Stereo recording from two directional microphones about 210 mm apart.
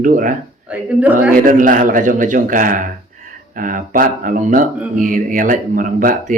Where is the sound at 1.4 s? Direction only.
40° right (ahead or behind).